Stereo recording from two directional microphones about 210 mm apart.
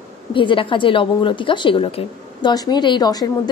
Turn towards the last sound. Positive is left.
turn(degrees=20)  # may be behind; listen again after turning